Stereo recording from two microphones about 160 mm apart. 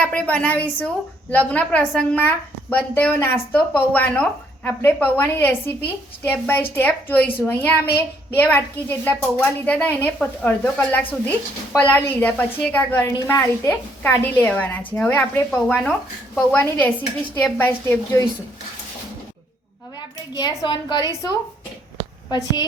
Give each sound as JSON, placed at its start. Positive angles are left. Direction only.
{"t": 0.0, "sound": "a woman's voice", "side_deg": 10}
{"t": 20.3, "sound": "a woman's voice", "side_deg": 25}